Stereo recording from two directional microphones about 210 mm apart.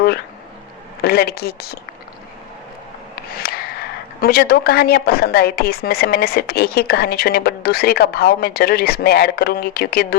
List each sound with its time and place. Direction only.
1.0 s a woman's voice: 50° left (ahead or behind)
3.2 s a sound: 45° left (ahead or behind)
4.2 s a woman's voice: 45° left (ahead or behind)